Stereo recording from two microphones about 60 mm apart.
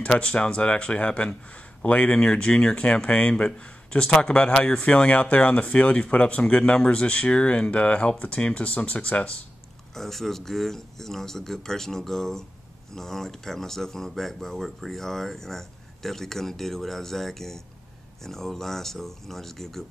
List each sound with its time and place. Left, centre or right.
0.0 s speech: centre
9.9 s speech: centre